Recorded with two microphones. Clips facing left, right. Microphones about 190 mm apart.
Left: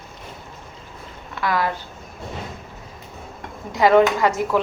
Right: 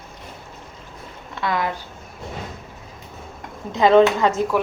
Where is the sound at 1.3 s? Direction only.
25° right (ahead or behind).